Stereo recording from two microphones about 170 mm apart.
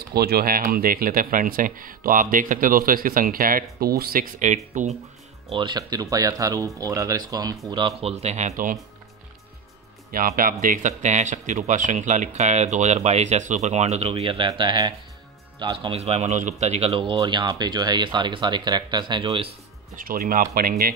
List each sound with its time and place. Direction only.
0.1 s speech: 65° right (ahead or behind); by 4.9 s 45° right (ahead or behind)
5.5 s a man's voice: 25° right (ahead or behind); by 8.7 s 50° right (ahead or behind)
10.1 s a man's voice: 55° right (ahead or behind); by 19.5 s 30° right (ahead or behind)
20.0 s speech: 55° right (ahead or behind)